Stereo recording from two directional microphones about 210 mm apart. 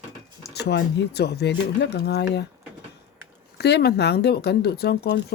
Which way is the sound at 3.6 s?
50° left (ahead or behind).